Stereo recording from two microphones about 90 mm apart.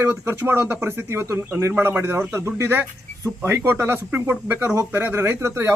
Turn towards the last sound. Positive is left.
turn(degrees=-30)  # may be behind; listen again after turning